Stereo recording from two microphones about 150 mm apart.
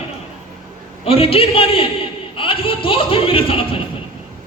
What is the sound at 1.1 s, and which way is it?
Speech, 40° left (ahead or behind).